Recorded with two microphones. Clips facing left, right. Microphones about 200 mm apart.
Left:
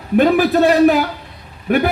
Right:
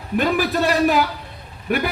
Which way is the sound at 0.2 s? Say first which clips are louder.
Left 7 dB; 50° left (ahead or behind).